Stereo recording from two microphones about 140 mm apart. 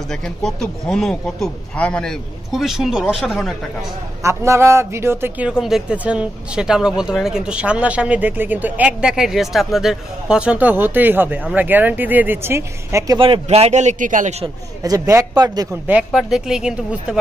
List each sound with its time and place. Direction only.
0.1 s speech: 5° left (ahead or behind)
4.2 s a man's voice: 20° right (ahead or behind)
5.5 s speech: 5° right (ahead or behind); by 13.2 s 25° right (ahead or behind)
13.2 s a man's voice: 40° right (ahead or behind); by 14.3 s 70° right (ahead or behind)
14.8 s a man's voice: 25° right (ahead or behind)
15.9 s speech: 5° right (ahead or behind)